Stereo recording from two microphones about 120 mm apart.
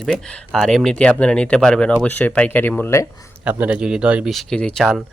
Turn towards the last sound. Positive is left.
turn(degrees=5)  # may be behind; listen again after turning